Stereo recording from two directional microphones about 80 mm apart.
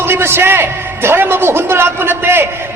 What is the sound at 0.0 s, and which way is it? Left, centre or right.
A man's voice, right.